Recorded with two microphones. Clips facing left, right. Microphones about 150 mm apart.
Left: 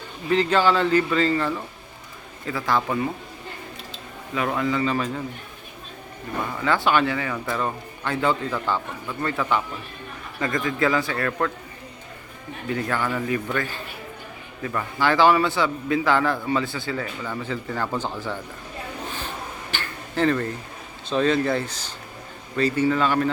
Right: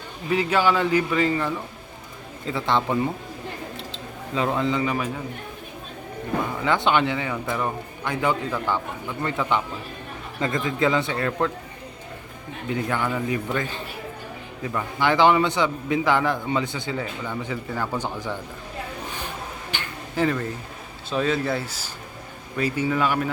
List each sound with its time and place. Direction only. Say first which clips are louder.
0.3 s a man's voice: left 1 dB; 10° right (ahead or behind)
2.5 s a man's voice: right 1 dB; 25° right (ahead or behind)
4.4 s a man's voice: right 1 dB; 20° right (ahead or behind)
6.7 s a man's voice: left 1 dB; 20° right (ahead or behind)
12.6 s a man's voice: even; 15° right (ahead or behind)
14.7 s a man's voice: even; 15° right (ahead or behind)
19.7 s a sound: even; 15° right (ahead or behind)
21.1 s a man's voice: left 3 dB; 5° right (ahead or behind)